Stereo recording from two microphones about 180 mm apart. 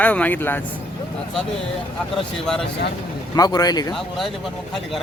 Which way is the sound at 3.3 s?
20° left (ahead or behind).